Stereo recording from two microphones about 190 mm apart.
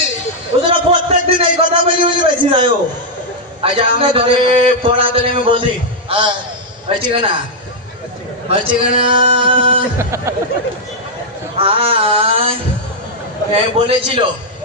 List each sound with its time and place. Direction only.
0.6 s a sound: 25° right (ahead or behind)
3.6 s a man's voice: 25° right (ahead or behind)
8.4 s a man's voice: 25° right (ahead or behind)
10.0 s speech: 15° right (ahead or behind)
11.5 s a man's voice: 30° right (ahead or behind)